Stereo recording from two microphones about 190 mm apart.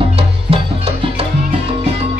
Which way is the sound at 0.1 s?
30° right (ahead or behind).